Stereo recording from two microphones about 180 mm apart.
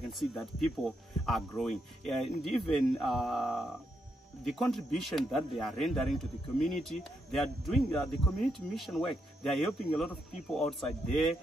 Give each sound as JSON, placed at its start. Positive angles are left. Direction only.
{"t": 0.4, "sound": "speech", "side_deg": 0}